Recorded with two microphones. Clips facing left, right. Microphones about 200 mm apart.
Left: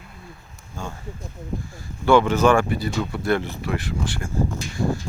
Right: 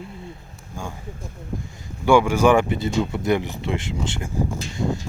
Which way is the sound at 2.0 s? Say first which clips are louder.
Even; 10° right (ahead or behind).